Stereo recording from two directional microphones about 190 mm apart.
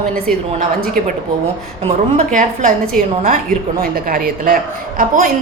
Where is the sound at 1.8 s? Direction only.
40° right (ahead or behind).